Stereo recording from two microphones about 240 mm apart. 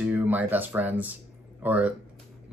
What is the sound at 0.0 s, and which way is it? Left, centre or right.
Speech, centre.